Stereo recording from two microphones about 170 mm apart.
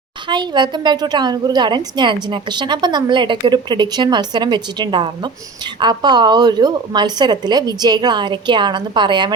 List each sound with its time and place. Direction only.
0.3 s a woman's voice: 25° right (ahead or behind)